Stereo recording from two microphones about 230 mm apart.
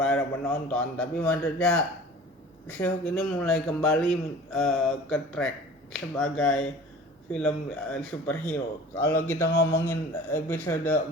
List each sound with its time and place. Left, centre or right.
0.0 s a man's voice: centre